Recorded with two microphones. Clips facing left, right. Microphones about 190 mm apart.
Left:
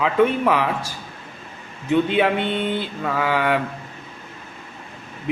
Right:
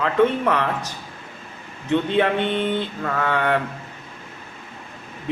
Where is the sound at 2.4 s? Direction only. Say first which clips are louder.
Right 1 dB; 20° right (ahead or behind).